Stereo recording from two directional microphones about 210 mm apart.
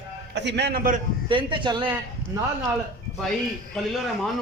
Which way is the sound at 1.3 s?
25° right (ahead or behind).